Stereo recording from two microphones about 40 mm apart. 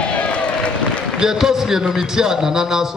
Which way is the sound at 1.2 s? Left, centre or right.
Centre.